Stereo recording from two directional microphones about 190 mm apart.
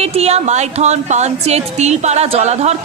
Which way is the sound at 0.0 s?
35° right (ahead or behind).